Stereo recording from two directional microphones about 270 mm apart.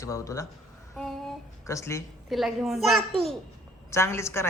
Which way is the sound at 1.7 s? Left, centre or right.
Centre.